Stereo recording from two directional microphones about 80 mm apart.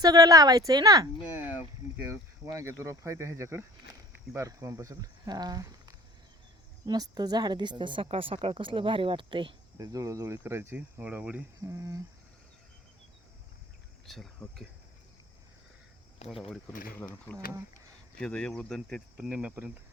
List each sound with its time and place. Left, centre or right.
0.0 s speech: right
1.2 s a sound: centre
2.4 s speech: right
4.4 s a woman's voice: right
9.7 s speech: right
10.3 s speech: right
11.0 s speech: centre
11.6 s speech: right
14.1 s speech: centre
16.3 s speech: centre
16.6 s speech: left
18.2 s speech: centre
19.1 s speech: centre